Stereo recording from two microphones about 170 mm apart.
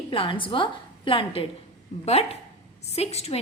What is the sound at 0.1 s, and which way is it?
Speech, 30° left (ahead or behind).